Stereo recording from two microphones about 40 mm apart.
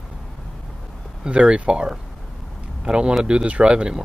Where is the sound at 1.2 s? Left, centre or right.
Right.